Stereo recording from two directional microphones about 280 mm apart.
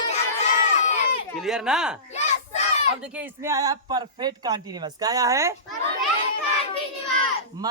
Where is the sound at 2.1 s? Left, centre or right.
Left.